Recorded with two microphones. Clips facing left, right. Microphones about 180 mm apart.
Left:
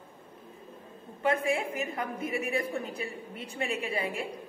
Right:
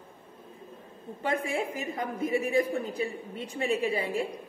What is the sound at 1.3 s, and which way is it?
A woman's voice, 30° right (ahead or behind).